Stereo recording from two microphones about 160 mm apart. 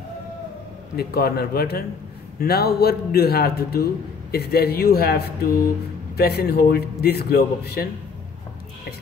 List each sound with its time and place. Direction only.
0.9 s a man's voice: 75° left (ahead or behind)